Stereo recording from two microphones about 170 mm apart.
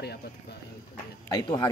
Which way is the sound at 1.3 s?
20° left (ahead or behind).